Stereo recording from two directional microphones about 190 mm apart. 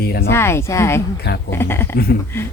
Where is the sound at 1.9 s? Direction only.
55° left (ahead or behind).